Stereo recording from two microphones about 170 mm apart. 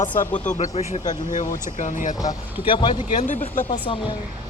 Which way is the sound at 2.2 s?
25° left (ahead or behind).